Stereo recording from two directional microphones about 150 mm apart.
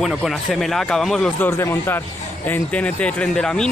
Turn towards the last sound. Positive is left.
turn(degrees=5)  # may be behind; listen again after turning